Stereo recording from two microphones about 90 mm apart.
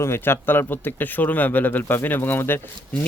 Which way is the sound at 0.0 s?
30° left (ahead or behind).